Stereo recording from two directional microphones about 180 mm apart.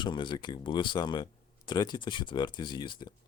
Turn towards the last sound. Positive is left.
turn(degrees=25)  # may be behind; listen again after turning